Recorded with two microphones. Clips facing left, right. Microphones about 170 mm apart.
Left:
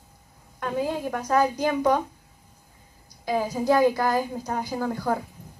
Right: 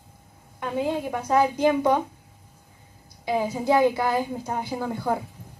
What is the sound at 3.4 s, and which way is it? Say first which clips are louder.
A woman's voice: even; 25° right (ahead or behind).